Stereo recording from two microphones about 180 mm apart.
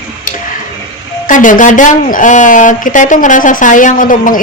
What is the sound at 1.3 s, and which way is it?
A woman's voice, 45° left (ahead or behind).